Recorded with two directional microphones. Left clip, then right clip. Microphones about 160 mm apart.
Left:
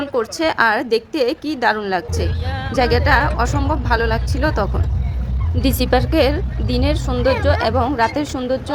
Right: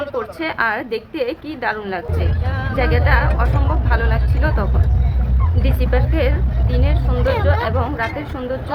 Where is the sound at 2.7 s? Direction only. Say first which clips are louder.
Left 4 dB; 60° left (ahead or behind).